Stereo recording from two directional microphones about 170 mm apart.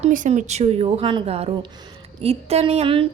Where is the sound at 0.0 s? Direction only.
45° right (ahead or behind).